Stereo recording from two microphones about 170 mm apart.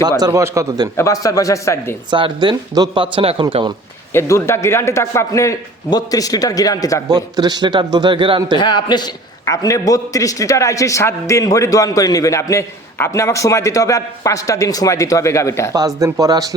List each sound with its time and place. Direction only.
0.2 s a man's voice: 15° right (ahead or behind)
0.9 s a man's voice: 20° left (ahead or behind)
2.0 s a man's voice: 30° right (ahead or behind)
4.1 s a man's voice: 15° left (ahead or behind)
7.1 s a man's voice: 25° right (ahead or behind)
8.5 s a man's voice: 25° left (ahead or behind)
15.7 s a man's voice: 20° right (ahead or behind)